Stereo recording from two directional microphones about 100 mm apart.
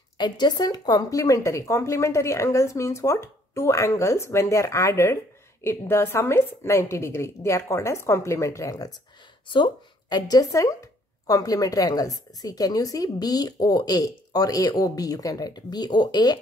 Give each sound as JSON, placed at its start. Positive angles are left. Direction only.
{"t": 0.2, "sound": "a woman's voice", "side_deg": 45}